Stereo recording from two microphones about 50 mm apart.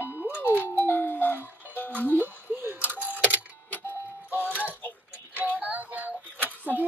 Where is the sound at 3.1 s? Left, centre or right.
Right.